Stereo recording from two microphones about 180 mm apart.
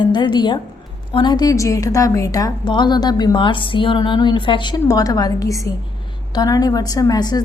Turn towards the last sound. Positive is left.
turn(degrees=20)  # may be behind; listen again after turning